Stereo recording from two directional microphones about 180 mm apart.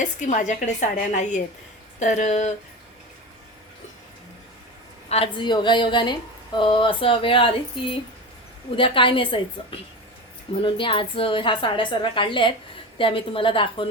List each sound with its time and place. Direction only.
0.0 s a woman's voice: 45° left (ahead or behind)
5.0 s a woman's voice: 35° left (ahead or behind)